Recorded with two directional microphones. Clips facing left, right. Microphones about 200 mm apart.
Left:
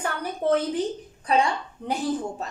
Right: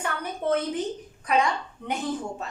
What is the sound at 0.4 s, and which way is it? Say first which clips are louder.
A woman's voice: left 3 dB; 35° left (ahead or behind).